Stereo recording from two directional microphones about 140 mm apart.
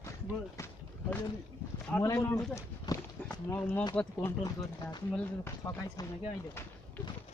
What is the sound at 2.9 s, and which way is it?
Run, 25° left (ahead or behind).